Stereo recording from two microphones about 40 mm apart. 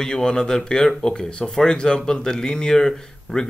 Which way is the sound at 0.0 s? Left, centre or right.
Centre.